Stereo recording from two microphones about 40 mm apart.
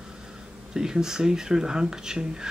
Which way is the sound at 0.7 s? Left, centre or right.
Centre.